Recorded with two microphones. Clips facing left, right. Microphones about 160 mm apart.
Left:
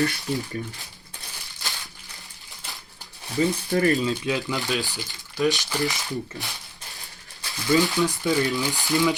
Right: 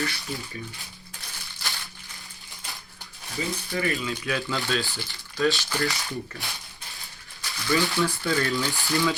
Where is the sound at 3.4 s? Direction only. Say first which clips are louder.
Left 8 dB; 40° left (ahead or behind).